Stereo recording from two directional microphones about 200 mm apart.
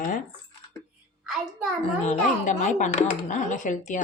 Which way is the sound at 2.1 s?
35° left (ahead or behind).